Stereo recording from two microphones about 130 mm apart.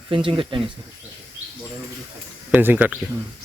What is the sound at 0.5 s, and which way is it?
Speech, 40° right (ahead or behind).